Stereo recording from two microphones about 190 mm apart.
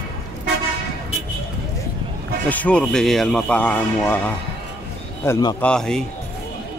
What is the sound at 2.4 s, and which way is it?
A man's voice, 5° left (ahead or behind).